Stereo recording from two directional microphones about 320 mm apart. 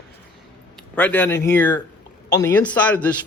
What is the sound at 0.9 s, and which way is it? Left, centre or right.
A man's voice, centre.